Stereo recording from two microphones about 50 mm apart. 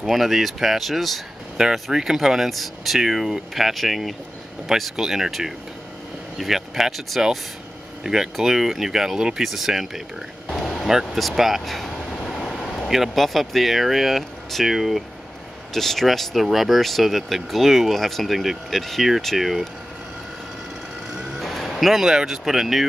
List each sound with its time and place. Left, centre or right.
0.0 s speech: centre
1.6 s speech: centre
10.5 s a sound: centre
12.9 s speech: centre
21.1 s music: centre